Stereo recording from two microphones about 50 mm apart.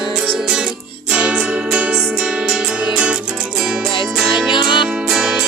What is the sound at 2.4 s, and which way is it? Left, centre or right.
Music, centre.